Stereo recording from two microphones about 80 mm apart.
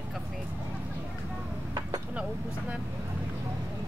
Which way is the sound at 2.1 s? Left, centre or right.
Centre.